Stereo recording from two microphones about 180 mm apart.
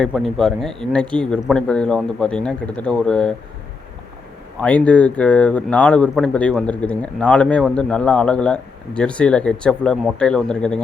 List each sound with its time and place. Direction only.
0.0 s speech: centre (ahead or behind)
4.6 s speech: 5° left (ahead or behind)